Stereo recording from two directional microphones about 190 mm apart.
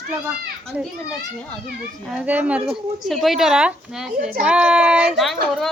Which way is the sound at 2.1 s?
5° right (ahead or behind).